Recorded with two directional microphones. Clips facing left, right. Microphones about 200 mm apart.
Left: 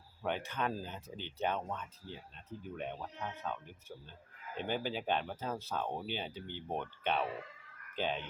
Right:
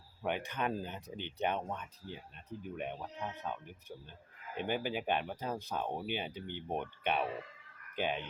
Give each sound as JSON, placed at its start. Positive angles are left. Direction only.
{"t": 0.2, "sound": "speech", "side_deg": -15}